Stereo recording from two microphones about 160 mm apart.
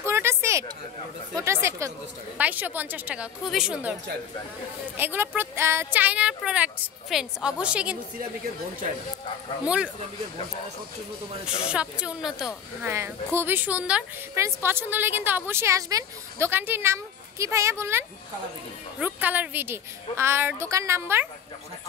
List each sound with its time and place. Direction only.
0.0 s a sound: 15° right (ahead or behind)
1.3 s speech: 15° right (ahead or behind)
4.9 s speech: 10° right (ahead or behind)
11.6 s speech: 5° right (ahead or behind)
12.8 s speech: 15° right (ahead or behind)